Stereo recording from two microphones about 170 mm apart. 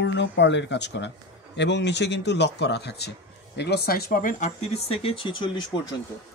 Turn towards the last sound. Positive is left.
turn(degrees=25)  # may be behind; listen again after turning